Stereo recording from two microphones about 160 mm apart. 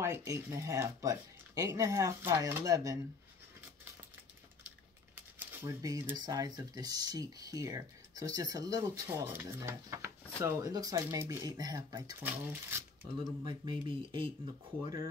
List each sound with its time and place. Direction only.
0.0 s speech: 15° right (ahead or behind)
5.1 s speech: 15° right (ahead or behind)
9.1 s speech: 15° right (ahead or behind)
13.4 s speech: 35° right (ahead or behind)